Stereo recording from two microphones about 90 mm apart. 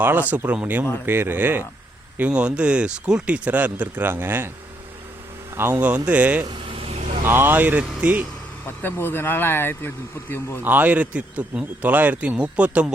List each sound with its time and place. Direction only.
0.0 s speech: 20° right (ahead or behind)
5.5 s speech: 25° right (ahead or behind)
6.4 s vehicle: 60° right (ahead or behind); by 6.9 s 80° right
7.3 s speech: 20° right (ahead or behind)
8.6 s speech: 25° left (ahead or behind)
10.6 s speech: 20° right (ahead or behind)